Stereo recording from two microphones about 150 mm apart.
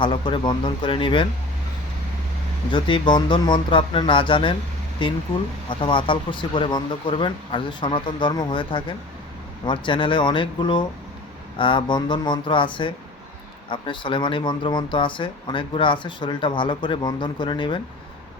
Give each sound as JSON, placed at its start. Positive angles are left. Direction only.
{"t": 0.0, "sound": "speech", "side_deg": 35}
{"t": 2.6, "sound": "speech", "side_deg": 35}